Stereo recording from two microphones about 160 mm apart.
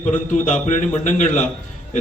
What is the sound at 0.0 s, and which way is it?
A man's voice, 45° left (ahead or behind).